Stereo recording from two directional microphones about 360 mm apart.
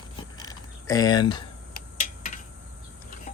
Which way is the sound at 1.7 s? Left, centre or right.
Left.